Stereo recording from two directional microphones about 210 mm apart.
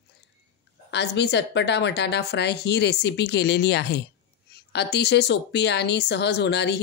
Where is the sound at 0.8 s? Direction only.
55° left (ahead or behind).